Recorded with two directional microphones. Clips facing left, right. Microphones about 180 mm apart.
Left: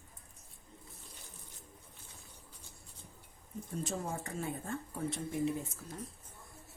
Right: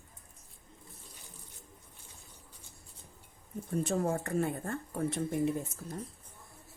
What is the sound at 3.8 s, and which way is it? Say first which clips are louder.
Speech: right 8 dB; 60° right (ahead or behind).